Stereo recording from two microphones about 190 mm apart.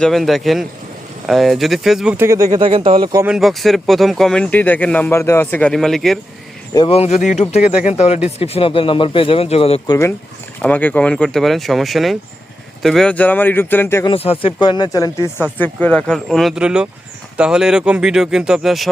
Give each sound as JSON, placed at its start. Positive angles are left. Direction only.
{"t": 0.0, "sound": "speech", "side_deg": 0}
{"t": 2.5, "sound": "speech", "side_deg": -30}
{"t": 3.2, "sound": "speech", "side_deg": 0}
{"t": 6.7, "sound": "speech", "side_deg": 30}
{"t": 10.6, "sound": "speech", "side_deg": 10}
{"t": 14.1, "sound": "speech", "side_deg": 30}